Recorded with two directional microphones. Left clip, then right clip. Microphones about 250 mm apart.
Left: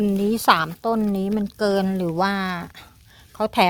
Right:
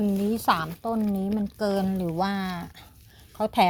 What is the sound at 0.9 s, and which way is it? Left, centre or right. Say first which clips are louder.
Speech: left 3 dB; left.